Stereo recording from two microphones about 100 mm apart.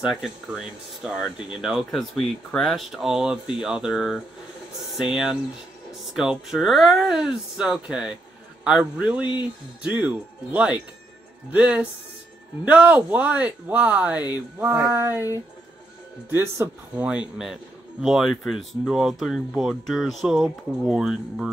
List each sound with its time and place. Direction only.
0.1 s speech: 5° right (ahead or behind)
14.6 s speech: 25° right (ahead or behind)
16.3 s speech: 25° right (ahead or behind)
16.9 s speech: 10° right (ahead or behind)